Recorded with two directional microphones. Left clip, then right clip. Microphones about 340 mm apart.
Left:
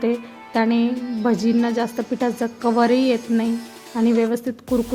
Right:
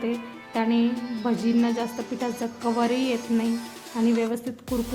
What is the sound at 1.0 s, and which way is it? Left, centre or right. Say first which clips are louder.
Speech: left 5 dB; centre.